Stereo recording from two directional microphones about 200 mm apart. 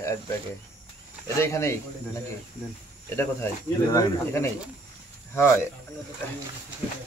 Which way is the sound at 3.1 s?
10° left (ahead or behind).